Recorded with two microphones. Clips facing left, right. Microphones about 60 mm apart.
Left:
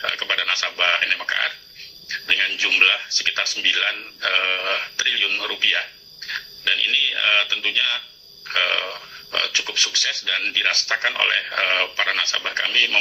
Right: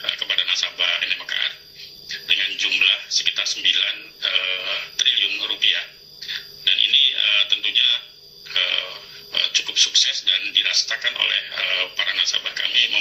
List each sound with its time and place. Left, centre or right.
0.0 s speech: left